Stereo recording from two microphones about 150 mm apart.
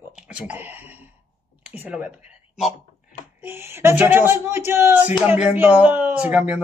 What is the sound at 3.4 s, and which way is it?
Speech, 15° right (ahead or behind).